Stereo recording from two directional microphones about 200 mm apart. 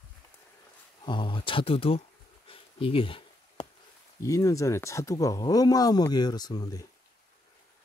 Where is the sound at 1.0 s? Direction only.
25° left (ahead or behind).